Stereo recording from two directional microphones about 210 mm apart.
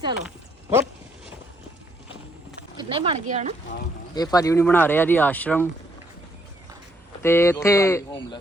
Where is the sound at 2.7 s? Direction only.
25° right (ahead or behind).